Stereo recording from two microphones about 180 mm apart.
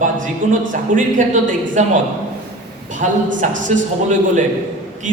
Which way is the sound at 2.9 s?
45° right (ahead or behind).